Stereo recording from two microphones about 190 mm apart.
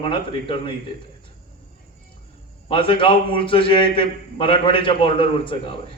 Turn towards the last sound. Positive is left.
turn(degrees=25)  # may be behind; listen again after turning